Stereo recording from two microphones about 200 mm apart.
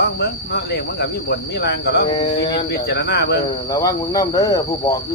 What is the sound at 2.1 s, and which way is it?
Speech, 25° left (ahead or behind).